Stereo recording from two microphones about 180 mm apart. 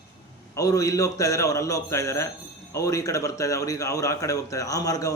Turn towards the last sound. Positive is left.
turn(degrees=20)  # may be behind; listen again after turning